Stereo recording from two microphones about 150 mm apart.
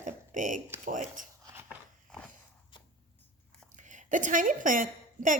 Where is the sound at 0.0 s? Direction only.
60° right (ahead or behind).